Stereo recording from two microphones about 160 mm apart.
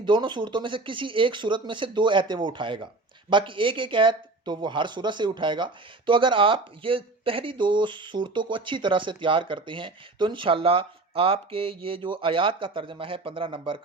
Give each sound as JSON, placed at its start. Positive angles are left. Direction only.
{"t": 0.0, "sound": "speech", "side_deg": -30}